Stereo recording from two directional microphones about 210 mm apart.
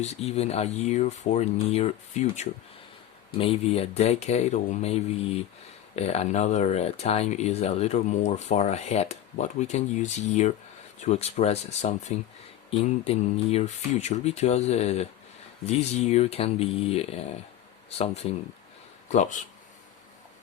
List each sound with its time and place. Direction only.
0.0 s speech: 30° left (ahead or behind)